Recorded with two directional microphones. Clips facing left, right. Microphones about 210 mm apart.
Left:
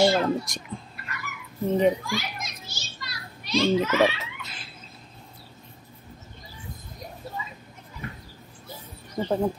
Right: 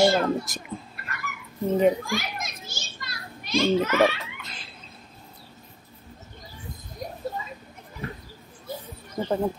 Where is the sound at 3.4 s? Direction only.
50° right (ahead or behind).